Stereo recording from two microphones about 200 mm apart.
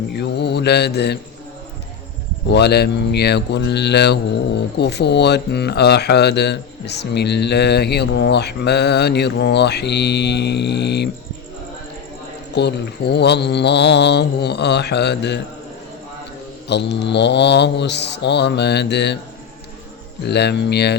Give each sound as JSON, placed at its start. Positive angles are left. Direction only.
{"t": 0.1, "sound": "mantra", "side_deg": 55}
{"t": 2.5, "sound": "speech", "side_deg": 55}
{"t": 12.5, "sound": "speech", "side_deg": 55}
{"t": 16.6, "sound": "speech", "side_deg": 60}
{"t": 20.2, "sound": "speech", "side_deg": 55}